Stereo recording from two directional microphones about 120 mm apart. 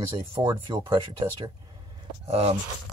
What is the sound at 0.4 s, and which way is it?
Speech, 40° right (ahead or behind).